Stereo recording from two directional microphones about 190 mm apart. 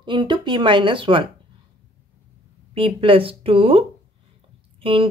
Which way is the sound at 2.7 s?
30° right (ahead or behind).